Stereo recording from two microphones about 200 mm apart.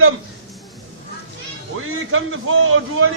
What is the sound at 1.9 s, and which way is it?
A man's voice, 90° right.